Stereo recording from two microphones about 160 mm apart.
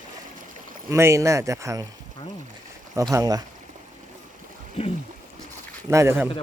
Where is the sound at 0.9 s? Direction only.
20° right (ahead or behind).